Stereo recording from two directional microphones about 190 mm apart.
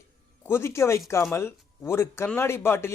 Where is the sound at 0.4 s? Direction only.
15° left (ahead or behind).